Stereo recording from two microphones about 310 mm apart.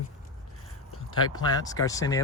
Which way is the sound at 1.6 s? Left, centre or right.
Centre.